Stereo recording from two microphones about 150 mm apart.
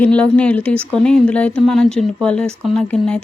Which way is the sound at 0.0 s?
10° left (ahead or behind).